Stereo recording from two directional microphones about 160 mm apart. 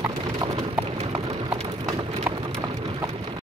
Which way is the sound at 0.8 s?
20° right (ahead or behind).